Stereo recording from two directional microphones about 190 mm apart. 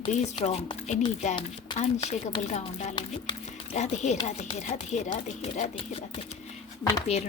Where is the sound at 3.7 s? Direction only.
40° left (ahead or behind).